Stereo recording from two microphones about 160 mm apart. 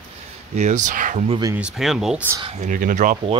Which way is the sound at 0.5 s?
50° right (ahead or behind).